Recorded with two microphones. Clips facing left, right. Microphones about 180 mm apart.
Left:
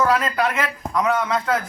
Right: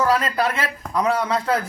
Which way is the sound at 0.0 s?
30° right (ahead or behind).